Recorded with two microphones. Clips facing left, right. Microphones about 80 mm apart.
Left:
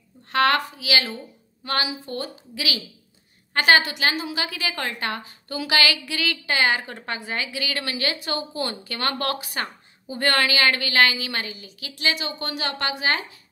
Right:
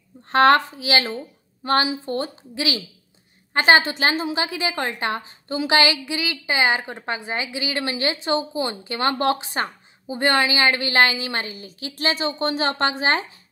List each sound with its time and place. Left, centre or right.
0.3 s a woman's voice: right